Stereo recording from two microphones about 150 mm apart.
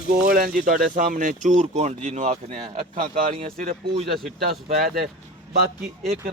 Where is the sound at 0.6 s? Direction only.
60° right (ahead or behind).